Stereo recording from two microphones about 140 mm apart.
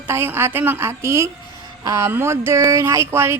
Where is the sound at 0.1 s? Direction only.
15° right (ahead or behind).